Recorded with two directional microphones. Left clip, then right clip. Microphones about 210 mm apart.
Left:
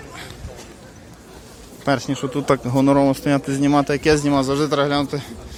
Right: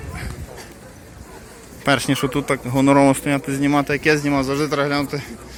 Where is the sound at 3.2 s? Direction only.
10° left (ahead or behind).